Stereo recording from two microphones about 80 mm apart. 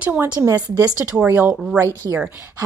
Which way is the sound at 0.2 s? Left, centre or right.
Right.